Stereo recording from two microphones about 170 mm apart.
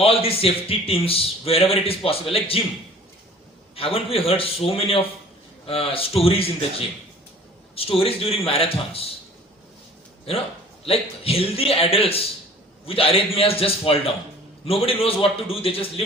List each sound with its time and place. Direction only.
0.0 s a man's voice: 35° left (ahead or behind)
3.8 s a man's voice: 35° left (ahead or behind)
10.8 s a man's voice: 35° left (ahead or behind)